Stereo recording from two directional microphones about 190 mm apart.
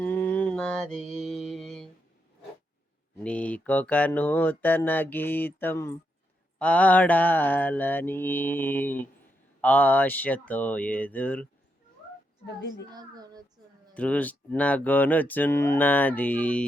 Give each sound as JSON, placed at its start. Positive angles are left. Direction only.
{"t": 0.0, "sound": "mantra", "side_deg": 10}
{"t": 3.2, "sound": "mantra", "side_deg": 5}
{"t": 12.5, "sound": "a child's voice", "side_deg": 70}
{"t": 12.9, "sound": "a child's voice", "side_deg": -20}
{"t": 13.9, "sound": "mantra", "side_deg": 5}